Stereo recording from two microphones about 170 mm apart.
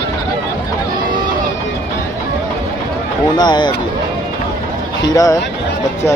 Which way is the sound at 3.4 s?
25° left (ahead or behind).